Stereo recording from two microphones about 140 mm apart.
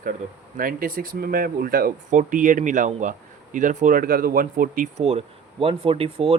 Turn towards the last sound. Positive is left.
turn(degrees=-40)  # may be behind; listen again after turning